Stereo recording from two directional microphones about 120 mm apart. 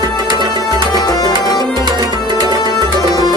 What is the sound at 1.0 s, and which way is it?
Tabla, 35° left (ahead or behind).